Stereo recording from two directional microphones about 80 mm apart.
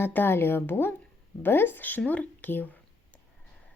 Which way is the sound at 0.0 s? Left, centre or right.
Left.